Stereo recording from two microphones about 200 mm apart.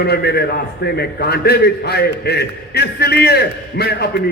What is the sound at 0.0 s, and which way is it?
A man's voice, 55° left (ahead or behind).